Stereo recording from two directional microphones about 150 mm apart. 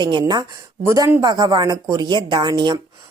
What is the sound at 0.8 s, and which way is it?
Speech, 20° right (ahead or behind).